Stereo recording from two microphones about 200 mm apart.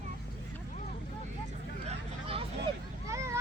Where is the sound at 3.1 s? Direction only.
15° right (ahead or behind).